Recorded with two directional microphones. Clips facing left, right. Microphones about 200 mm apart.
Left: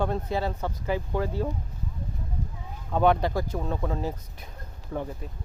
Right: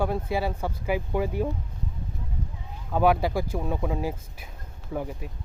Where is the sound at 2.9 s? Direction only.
5° right (ahead or behind).